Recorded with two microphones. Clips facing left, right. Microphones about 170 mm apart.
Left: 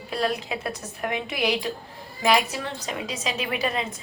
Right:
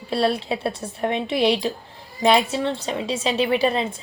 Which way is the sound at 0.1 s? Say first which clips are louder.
Right 5 dB; 30° right (ahead or behind).